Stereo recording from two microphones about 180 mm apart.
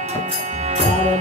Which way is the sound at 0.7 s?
40° right (ahead or behind).